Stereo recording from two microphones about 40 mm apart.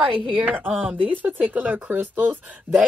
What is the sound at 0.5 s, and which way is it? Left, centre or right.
Speech, right.